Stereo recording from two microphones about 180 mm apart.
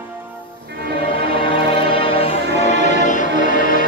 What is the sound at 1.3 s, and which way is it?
Music, 30° left (ahead or behind).